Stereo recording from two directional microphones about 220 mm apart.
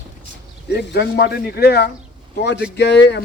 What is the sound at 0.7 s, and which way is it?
Speech, 50° left (ahead or behind).